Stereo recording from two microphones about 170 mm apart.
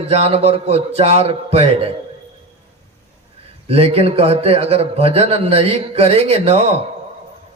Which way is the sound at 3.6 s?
35° right (ahead or behind).